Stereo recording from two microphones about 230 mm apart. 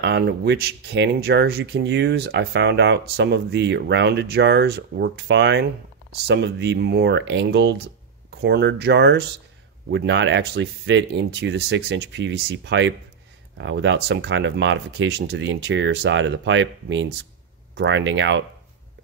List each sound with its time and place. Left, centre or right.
0.0 s speech: right